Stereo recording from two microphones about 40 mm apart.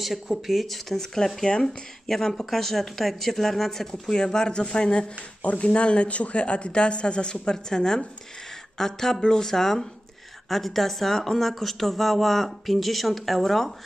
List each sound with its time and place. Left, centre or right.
0.0 s speech: centre